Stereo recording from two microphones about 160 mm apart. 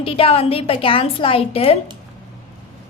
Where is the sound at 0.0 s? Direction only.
35° left (ahead or behind).